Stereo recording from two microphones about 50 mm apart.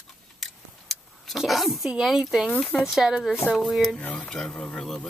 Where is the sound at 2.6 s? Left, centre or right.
Centre.